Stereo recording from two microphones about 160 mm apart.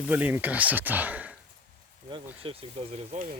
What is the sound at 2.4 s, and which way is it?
Speech, 35° right (ahead or behind).